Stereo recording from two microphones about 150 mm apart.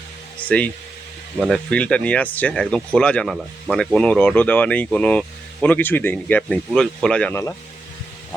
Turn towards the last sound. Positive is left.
turn(degrees=5)  # may be behind; listen again after turning